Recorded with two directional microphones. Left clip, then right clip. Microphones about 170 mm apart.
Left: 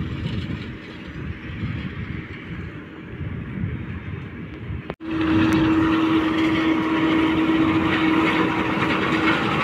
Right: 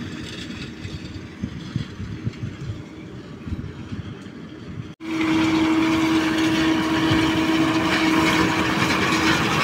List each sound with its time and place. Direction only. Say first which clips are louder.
5.0 s vehicle: even; 40° right (ahead or behind)